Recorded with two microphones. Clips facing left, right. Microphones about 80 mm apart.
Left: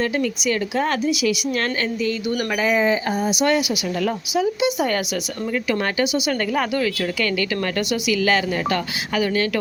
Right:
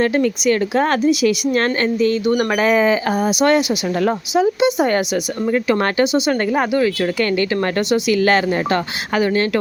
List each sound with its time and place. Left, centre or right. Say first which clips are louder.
0.0 s speech: right 6 dB; right
2.6 s speech: right 2 dB; right
3.2 s a woman's voice: right 4 dB; right
4.0 s speech: right 5 dB; right
7.9 s speech: right 5 dB; right